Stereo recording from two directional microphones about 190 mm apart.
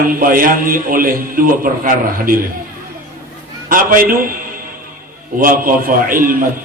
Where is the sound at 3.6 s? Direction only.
45° right (ahead or behind).